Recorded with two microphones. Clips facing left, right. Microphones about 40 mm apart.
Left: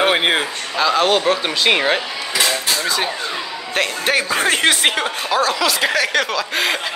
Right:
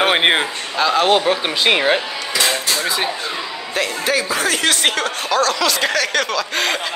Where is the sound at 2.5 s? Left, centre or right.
Centre.